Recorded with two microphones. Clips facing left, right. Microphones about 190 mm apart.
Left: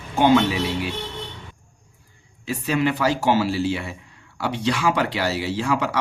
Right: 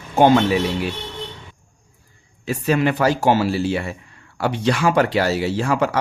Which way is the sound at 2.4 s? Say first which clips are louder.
Right 3 dB; 50° right (ahead or behind).